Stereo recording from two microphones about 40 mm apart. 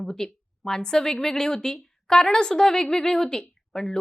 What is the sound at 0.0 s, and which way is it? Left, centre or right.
A woman's voice, centre.